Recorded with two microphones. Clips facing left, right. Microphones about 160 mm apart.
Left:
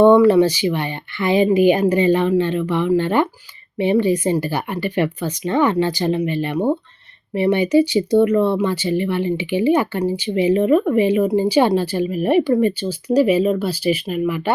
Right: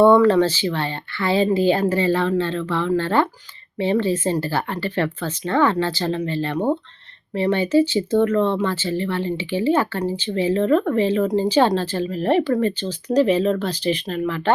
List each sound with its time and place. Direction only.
0.0 s speech: 15° left (ahead or behind)